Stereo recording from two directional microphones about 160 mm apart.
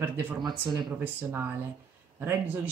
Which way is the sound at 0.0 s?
10° right (ahead or behind).